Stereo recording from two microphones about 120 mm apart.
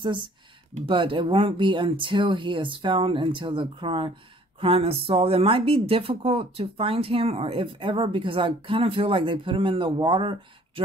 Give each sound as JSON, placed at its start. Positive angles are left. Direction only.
{"t": 0.8, "sound": "speech", "side_deg": -45}